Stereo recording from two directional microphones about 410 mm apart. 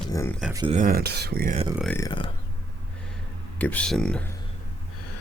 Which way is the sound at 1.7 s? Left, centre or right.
Centre.